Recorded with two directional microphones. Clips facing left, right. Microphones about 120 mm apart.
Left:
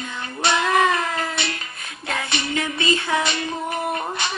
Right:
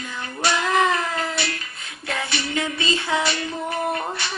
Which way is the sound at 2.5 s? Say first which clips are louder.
Left 2 dB; 20° right (ahead or behind).